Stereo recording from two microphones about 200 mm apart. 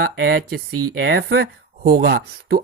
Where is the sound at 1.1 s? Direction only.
50° right (ahead or behind).